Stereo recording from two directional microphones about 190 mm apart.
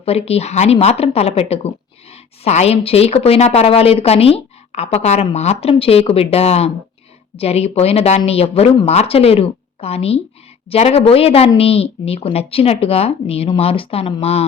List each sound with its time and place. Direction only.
0.0 s a woman's voice: 30° left (ahead or behind)